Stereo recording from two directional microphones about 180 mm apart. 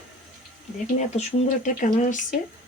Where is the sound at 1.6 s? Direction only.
45° left (ahead or behind).